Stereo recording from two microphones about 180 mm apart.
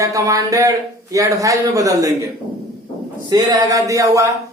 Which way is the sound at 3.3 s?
20° right (ahead or behind).